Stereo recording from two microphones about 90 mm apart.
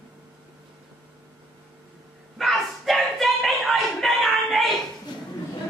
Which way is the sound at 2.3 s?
Centre (ahead or behind).